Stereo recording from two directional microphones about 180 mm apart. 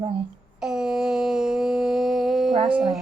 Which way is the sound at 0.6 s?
5° right (ahead or behind).